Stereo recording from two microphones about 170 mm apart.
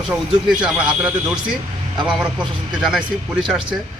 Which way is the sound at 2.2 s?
5° right (ahead or behind).